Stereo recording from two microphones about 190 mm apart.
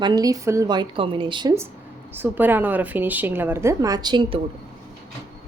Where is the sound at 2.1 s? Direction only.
10° right (ahead or behind).